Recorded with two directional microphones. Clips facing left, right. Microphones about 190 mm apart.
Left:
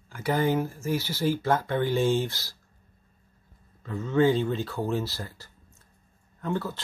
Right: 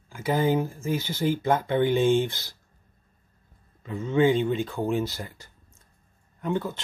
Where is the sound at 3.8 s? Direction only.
20° right (ahead or behind).